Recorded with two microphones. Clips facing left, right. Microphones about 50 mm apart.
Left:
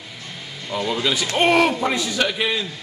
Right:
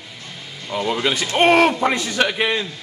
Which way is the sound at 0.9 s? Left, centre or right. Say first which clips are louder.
Right 2 dB; right.